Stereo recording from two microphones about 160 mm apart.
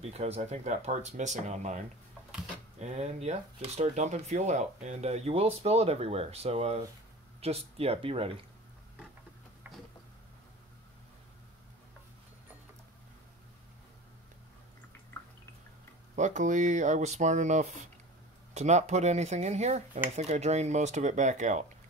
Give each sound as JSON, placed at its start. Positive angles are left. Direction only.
{"t": 0.0, "sound": "speech", "side_deg": -40}
{"t": 2.8, "sound": "speech", "side_deg": -45}
{"t": 16.2, "sound": "speech", "side_deg": -50}